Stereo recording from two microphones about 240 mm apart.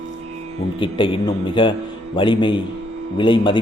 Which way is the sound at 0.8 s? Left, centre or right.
Left.